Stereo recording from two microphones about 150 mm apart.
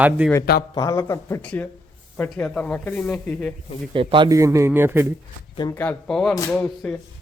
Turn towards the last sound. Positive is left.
turn(degrees=10)  # may be behind; listen again after turning